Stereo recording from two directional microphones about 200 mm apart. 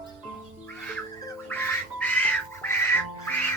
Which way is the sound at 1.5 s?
10° left (ahead or behind).